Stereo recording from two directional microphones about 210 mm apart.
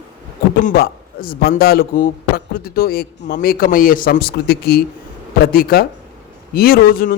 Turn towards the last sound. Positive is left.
turn(degrees=40)  # may be behind; listen again after turning